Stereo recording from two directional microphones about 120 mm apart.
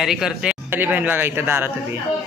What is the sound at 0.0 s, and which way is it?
A man's voice, 5° right (ahead or behind).